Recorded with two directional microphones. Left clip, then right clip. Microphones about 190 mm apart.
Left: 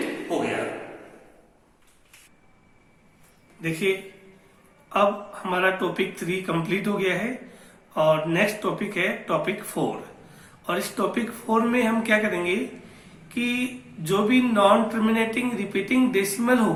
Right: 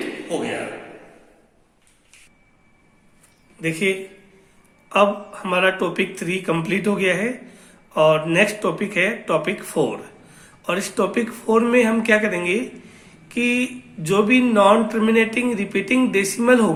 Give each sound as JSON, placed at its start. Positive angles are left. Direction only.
{"t": 3.6, "sound": "speech", "side_deg": -50}